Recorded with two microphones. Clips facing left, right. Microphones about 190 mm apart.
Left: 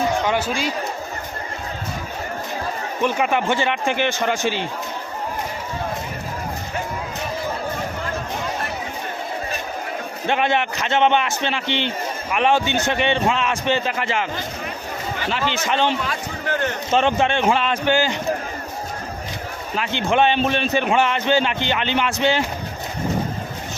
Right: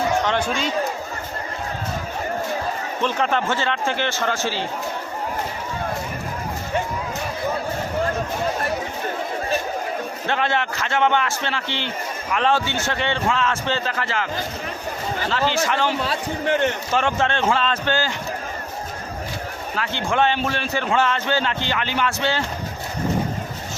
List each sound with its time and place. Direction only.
0.3 s a man's voice: 10° left (ahead or behind)
3.0 s a man's voice: 10° left (ahead or behind)
10.2 s a man's voice: 15° left (ahead or behind)
15.3 s a man's voice: 20° left (ahead or behind)
16.5 s speech: 20° right (ahead or behind)
16.9 s a man's voice: 20° left (ahead or behind)
19.7 s a man's voice: 20° left (ahead or behind)